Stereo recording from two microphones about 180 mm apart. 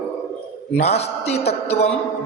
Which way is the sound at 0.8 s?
35° left (ahead or behind).